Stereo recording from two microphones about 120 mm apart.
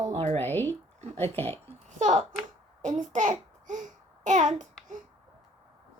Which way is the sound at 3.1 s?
90° right.